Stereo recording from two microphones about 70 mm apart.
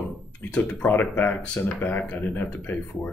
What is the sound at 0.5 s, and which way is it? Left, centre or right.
Speech, left.